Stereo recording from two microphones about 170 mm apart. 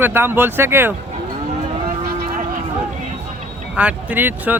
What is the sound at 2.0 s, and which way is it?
Vehicle, 65° right (ahead or behind).